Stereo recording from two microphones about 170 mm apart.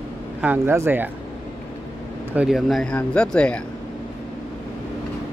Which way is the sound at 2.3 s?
Centre (ahead or behind).